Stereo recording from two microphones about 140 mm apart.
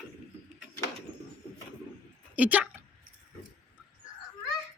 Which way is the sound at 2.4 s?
10° right (ahead or behind).